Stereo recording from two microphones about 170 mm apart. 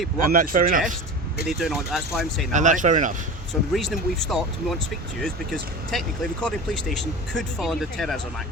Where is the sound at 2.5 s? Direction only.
45° right (ahead or behind).